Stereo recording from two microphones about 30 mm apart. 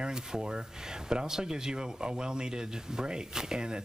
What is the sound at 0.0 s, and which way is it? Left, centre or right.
Speech, right.